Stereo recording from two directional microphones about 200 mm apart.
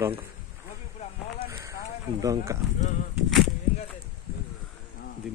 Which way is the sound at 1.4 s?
15° right (ahead or behind).